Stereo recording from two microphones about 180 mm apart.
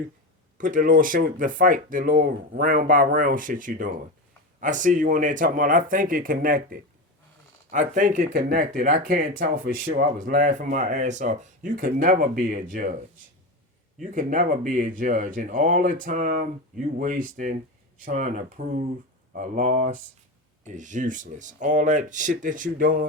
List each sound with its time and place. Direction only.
0.6 s speech: 50° right (ahead or behind)